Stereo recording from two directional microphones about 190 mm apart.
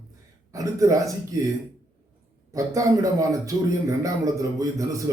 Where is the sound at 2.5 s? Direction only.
15° right (ahead or behind).